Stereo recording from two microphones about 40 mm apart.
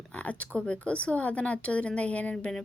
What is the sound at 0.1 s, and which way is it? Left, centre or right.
A woman's voice, left.